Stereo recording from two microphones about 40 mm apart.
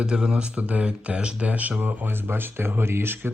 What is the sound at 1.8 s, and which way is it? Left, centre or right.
Speech, right.